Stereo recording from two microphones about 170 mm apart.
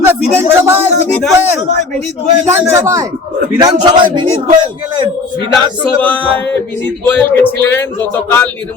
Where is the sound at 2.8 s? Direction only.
20° right (ahead or behind).